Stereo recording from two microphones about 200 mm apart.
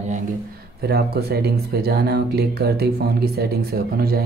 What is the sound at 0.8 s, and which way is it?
Speech, 50° right (ahead or behind).